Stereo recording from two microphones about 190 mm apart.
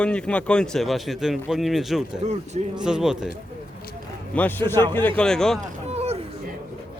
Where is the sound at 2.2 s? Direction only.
35° right (ahead or behind).